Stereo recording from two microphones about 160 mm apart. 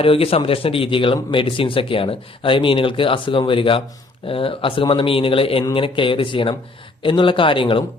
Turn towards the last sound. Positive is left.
turn(degrees=35)  # may be behind; listen again after turning